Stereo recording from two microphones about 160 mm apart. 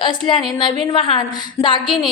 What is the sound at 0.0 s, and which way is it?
A woman's voice, 30° left (ahead or behind).